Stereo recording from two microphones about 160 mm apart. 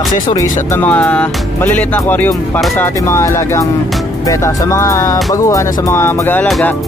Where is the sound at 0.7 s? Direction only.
10° left (ahead or behind).